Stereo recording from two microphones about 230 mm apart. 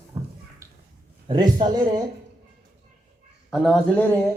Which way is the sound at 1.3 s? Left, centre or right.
Centre.